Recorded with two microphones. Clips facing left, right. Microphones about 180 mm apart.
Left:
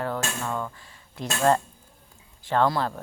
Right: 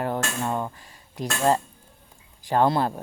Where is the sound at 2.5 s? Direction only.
20° right (ahead or behind).